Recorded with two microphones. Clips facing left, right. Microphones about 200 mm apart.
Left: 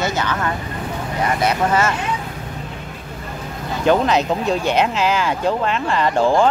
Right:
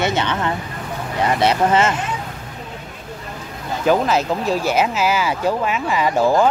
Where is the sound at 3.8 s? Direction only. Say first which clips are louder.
Left 1 dB; 5° right (ahead or behind).